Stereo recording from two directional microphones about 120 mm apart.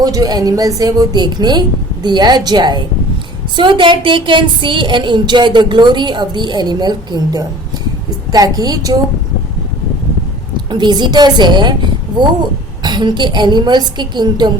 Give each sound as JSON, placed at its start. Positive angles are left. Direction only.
{"t": 0.0, "sound": "a woman's voice", "side_deg": -30}
{"t": 10.7, "sound": "a woman's voice", "side_deg": -40}